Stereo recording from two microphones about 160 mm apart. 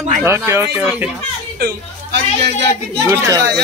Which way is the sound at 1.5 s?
85° right.